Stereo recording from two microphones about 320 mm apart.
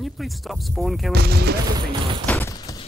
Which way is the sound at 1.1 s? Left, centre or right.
Right.